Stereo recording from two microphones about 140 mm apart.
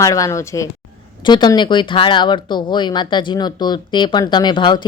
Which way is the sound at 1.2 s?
30° left (ahead or behind).